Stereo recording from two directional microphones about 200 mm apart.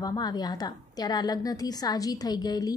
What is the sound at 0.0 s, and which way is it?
A woman's voice, 20° left (ahead or behind).